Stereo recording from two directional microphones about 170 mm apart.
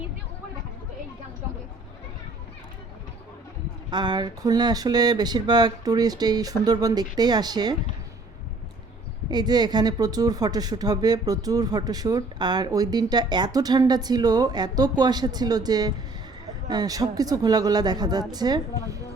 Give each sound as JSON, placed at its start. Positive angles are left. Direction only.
{"t": 3.8, "sound": "speech", "side_deg": -25}
{"t": 9.3, "sound": "speech", "side_deg": -25}